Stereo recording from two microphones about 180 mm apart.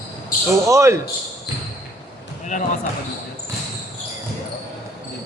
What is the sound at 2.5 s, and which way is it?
Speech, 45° left (ahead or behind).